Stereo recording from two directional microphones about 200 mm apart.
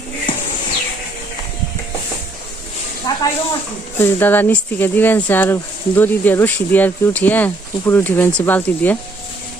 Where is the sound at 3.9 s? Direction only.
10° left (ahead or behind).